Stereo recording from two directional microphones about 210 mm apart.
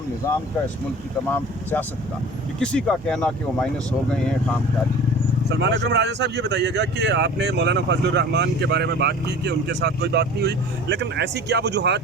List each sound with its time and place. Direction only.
0.2 s speech: 15° left (ahead or behind)
2.6 s speech: 5° left (ahead or behind)
5.5 s speech: 55° right (ahead or behind)